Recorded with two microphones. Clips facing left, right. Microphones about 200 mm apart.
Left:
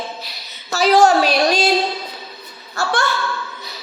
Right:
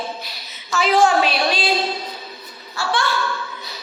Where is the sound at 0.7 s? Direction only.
40° left (ahead or behind).